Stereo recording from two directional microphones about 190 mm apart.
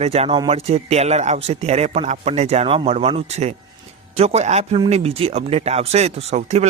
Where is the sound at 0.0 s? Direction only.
35° right (ahead or behind).